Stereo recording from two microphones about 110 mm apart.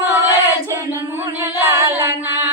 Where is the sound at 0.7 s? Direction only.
25° right (ahead or behind).